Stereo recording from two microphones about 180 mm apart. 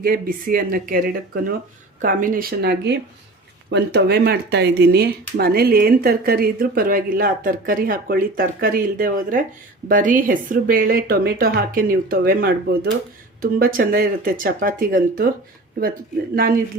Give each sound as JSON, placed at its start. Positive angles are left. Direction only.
{"t": 0.0, "sound": "speech", "side_deg": -55}
{"t": 16.3, "sound": "speech", "side_deg": -55}